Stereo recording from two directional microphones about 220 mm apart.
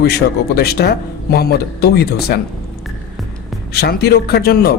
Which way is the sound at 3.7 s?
45° left (ahead or behind).